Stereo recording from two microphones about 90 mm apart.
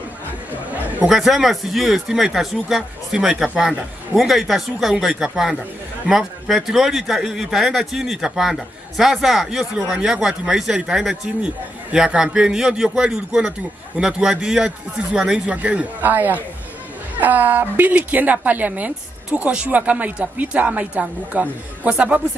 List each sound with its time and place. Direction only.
1.0 s a man's voice: 5° right (ahead or behind)